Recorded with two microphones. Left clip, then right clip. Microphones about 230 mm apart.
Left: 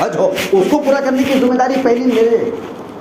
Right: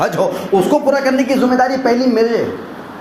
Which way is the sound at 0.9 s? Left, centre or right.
Right.